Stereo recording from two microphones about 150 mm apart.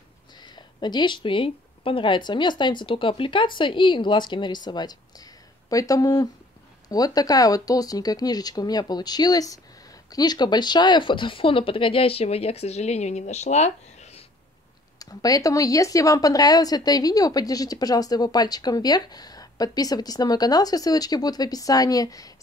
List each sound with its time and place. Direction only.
0.4 s speech: 30° left (ahead or behind); by 14.2 s 45° left (ahead or behind)
15.0 s speech: 25° left (ahead or behind)